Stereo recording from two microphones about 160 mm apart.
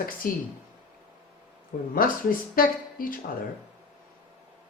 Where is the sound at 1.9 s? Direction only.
65° left (ahead or behind).